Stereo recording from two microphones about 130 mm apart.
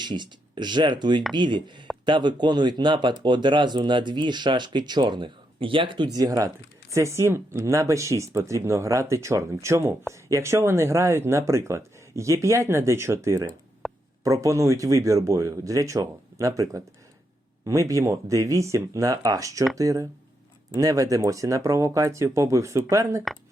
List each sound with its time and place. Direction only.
0.0 s speech: 35° right (ahead or behind)
6.1 s speech: 30° right (ahead or behind)
13.8 s a sound: centre (ahead or behind)
14.3 s speech: 25° right (ahead or behind)